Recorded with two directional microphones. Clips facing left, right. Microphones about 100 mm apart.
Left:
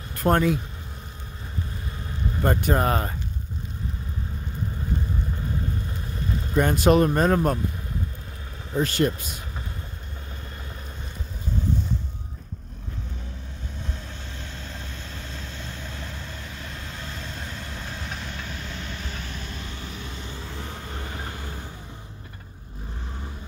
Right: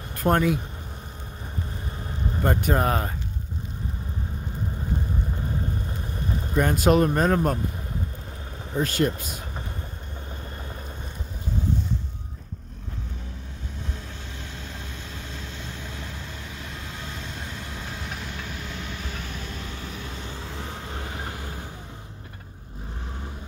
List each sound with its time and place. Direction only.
0.2 s speech: centre (ahead or behind)
2.4 s speech: 5° right (ahead or behind)
6.5 s speech: 5° right (ahead or behind)
8.7 s speech: centre (ahead or behind)
9.2 s speech: 45° right (ahead or behind)
14.4 s vehicle: 10° right (ahead or behind)